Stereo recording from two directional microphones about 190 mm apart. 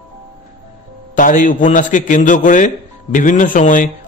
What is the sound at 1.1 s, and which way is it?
A man's voice, 45° left (ahead or behind).